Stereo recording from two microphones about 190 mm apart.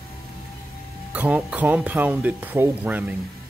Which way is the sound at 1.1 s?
5° right (ahead or behind).